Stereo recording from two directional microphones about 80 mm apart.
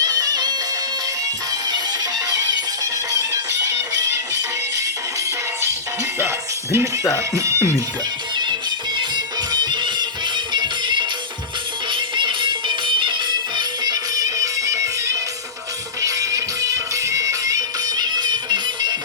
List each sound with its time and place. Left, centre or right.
0.0 s music: right
1.6 s music: right
6.1 s music: right
7.3 s speech: right
9.0 s music: right
11.9 s music: right